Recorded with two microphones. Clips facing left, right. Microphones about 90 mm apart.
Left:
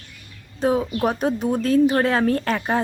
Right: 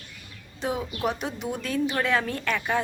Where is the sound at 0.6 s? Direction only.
40° left (ahead or behind).